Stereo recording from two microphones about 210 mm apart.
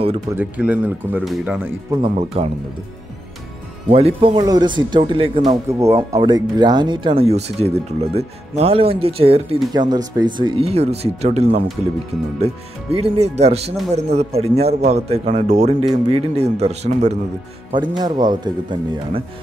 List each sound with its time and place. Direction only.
0.3 s speech: 5° right (ahead or behind)
2.0 s speech: 25° right (ahead or behind)
3.9 s speech: 30° right (ahead or behind)
12.9 s a man's voice: 30° right (ahead or behind)
17.7 s speech: 20° right (ahead or behind)